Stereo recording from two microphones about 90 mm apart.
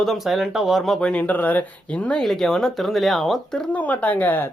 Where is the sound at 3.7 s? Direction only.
15° left (ahead or behind).